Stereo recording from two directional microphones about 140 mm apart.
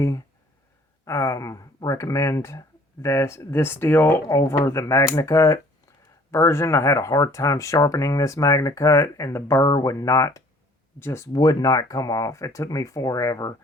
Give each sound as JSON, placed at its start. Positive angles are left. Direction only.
{"t": 1.0, "sound": "speech", "side_deg": 20}